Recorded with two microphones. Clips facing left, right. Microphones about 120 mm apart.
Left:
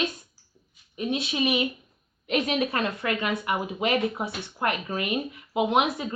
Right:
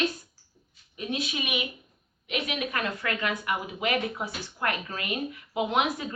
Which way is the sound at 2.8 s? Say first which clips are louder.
Left 3 dB; 20° left (ahead or behind).